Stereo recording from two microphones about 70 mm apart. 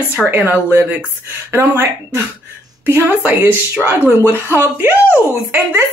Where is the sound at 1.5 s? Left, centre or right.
Right.